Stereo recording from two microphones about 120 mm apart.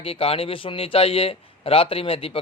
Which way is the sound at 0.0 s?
50° left (ahead or behind).